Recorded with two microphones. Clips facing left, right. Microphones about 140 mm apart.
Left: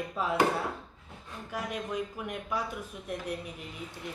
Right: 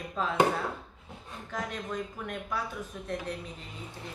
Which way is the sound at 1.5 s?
10° left (ahead or behind).